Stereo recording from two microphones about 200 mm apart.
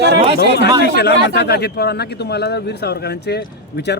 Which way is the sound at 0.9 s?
55° left (ahead or behind).